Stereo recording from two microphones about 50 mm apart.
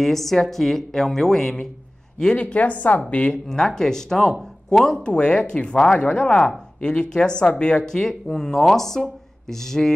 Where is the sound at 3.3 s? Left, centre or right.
Centre.